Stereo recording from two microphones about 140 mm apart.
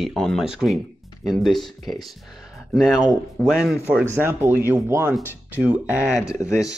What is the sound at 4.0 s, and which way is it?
Speech, 15° right (ahead or behind).